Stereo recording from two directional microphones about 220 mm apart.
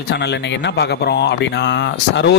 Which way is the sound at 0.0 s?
50° left (ahead or behind).